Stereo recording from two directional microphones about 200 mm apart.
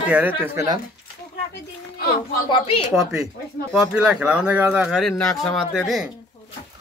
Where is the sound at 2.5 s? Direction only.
25° left (ahead or behind).